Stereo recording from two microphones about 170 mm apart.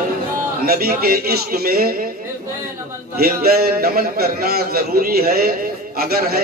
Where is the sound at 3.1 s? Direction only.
65° right (ahead or behind).